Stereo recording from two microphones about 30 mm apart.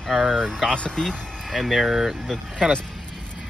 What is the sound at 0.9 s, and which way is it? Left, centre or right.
Speech, left.